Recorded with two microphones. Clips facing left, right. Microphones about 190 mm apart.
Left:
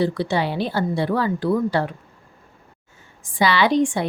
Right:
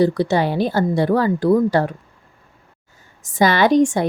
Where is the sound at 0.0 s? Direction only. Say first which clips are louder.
Right 5 dB; 45° right (ahead or behind).